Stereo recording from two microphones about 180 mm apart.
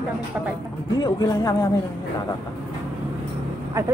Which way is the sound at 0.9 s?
20° left (ahead or behind).